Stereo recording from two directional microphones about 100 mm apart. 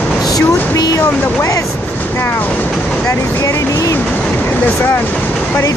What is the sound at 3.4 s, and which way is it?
Speech, 30° left (ahead or behind).